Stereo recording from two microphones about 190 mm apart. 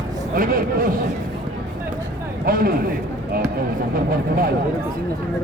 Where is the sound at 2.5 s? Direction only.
50° right (ahead or behind).